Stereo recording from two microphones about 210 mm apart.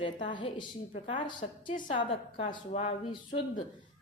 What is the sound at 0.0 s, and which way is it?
A woman's voice, 25° left (ahead or behind).